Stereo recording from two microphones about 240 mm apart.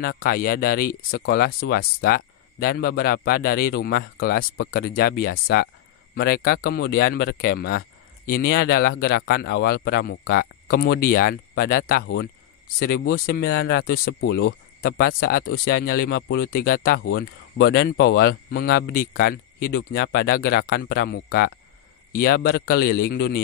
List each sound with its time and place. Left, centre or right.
0.2 s speech: left